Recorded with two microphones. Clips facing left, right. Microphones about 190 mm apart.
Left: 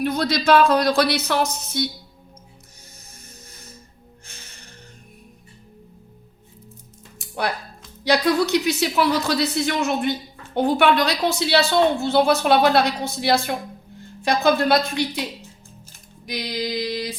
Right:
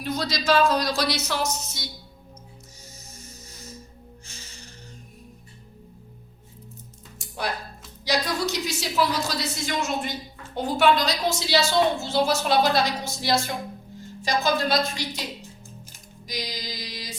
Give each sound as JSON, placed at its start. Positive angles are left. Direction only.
{"t": 0.0, "sound": "a woman's voice", "side_deg": 60}
{"t": 4.3, "sound": "music", "side_deg": 55}
{"t": 7.2, "sound": "music", "side_deg": 60}
{"t": 8.0, "sound": "a woman's voice", "side_deg": 60}
{"t": 16.2, "sound": "a woman's voice", "side_deg": 60}